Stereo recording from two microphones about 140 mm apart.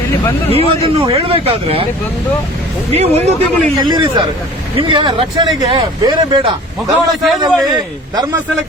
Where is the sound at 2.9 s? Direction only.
50° right (ahead or behind).